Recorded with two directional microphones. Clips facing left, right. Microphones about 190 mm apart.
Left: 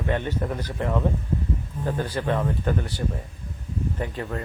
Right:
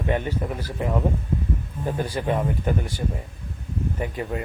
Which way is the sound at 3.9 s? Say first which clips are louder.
Right 4 dB; 10° right (ahead or behind).